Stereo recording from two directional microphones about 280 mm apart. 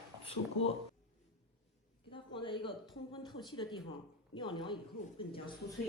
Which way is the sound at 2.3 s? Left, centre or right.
Centre.